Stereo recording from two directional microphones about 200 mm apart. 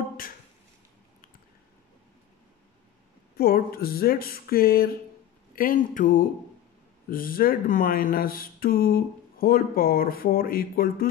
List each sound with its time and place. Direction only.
3.3 s speech: 50° left (ahead or behind)